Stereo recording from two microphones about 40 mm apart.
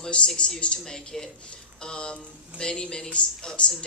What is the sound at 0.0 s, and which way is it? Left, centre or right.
Speech, left.